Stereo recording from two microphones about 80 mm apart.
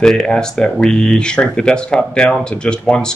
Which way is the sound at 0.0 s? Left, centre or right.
Centre.